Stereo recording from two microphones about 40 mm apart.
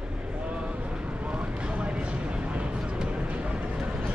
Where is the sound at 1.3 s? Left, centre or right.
Right.